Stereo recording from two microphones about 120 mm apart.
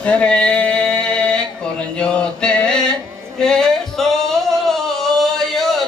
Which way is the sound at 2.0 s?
10° left (ahead or behind).